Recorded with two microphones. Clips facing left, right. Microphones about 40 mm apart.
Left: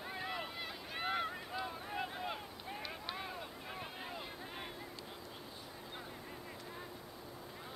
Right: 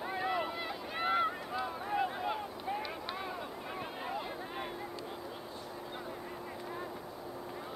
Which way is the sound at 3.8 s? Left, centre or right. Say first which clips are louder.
Right 7 dB; centre.